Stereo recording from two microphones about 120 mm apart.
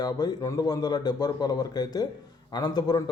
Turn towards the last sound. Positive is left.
turn(degrees=35)  # may be behind; listen again after turning